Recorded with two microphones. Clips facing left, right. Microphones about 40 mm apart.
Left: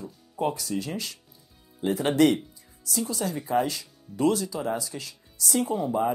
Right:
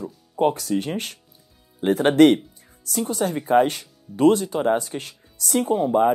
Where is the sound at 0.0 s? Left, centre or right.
Right.